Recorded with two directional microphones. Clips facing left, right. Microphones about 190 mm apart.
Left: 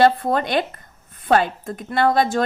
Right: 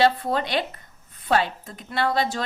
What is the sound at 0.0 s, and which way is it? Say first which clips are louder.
Speech: left 4 dB; 50° left (ahead or behind).